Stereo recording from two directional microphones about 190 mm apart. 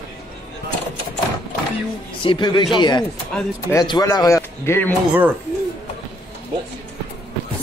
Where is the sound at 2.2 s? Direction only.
25° left (ahead or behind).